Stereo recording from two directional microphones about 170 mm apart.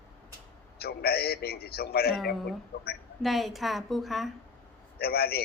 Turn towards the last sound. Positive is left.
turn(degrees=65)  # may be behind; listen again after turning